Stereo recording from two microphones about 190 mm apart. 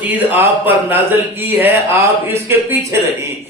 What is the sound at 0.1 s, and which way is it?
Speech, 10° right (ahead or behind).